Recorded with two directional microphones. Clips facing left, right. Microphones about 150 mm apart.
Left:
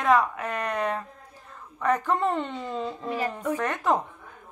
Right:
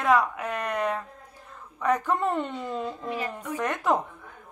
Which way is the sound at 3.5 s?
10° right (ahead or behind).